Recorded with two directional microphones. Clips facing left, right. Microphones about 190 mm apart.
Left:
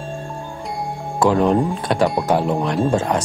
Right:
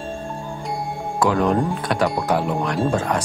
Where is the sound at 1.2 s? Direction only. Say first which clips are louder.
Left 3 dB; 25° left (ahead or behind).